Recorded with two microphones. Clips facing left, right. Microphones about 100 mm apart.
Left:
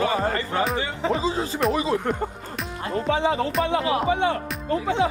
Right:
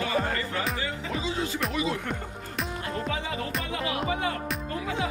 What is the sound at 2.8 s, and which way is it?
Music, 30° left (ahead or behind).